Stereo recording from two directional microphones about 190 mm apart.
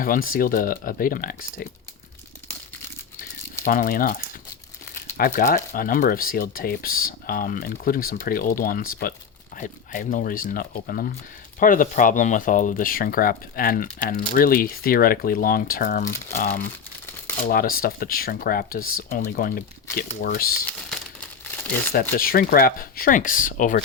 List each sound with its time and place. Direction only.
0.0 s speech: 50° left (ahead or behind)
3.6 s speech: 45° left (ahead or behind)
20.7 s crumpling: 5° left (ahead or behind)
22.2 s speech: 50° left (ahead or behind)